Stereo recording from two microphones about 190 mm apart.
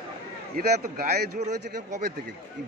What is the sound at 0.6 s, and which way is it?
Speech, 55° right (ahead or behind).